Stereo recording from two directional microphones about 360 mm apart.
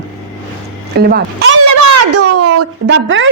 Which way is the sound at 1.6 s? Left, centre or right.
Right.